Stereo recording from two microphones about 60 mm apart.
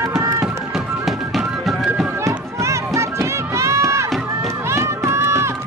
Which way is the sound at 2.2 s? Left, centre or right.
Right.